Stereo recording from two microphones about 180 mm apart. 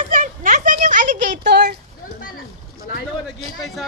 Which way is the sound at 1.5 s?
65° right (ahead or behind).